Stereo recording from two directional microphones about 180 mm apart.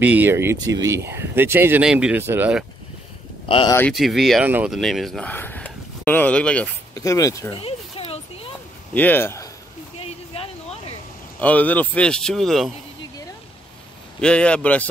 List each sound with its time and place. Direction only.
0.0 s speech: 10° right (ahead or behind)
3.4 s speech: 30° left (ahead or behind)
3.9 s speech: centre (ahead or behind)
6.9 s a man's voice: 20° left (ahead or behind)
7.5 s a sound: 30° left (ahead or behind)
8.9 s speech: 10° left (ahead or behind)
9.9 s a sound: 30° left (ahead or behind)
11.4 s speech: 10° left (ahead or behind)
14.2 s a man's voice: 5° left (ahead or behind)